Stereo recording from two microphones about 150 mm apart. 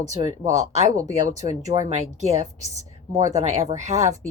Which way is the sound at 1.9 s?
45° right (ahead or behind).